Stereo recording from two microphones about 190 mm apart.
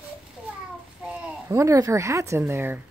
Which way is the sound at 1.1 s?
15° right (ahead or behind).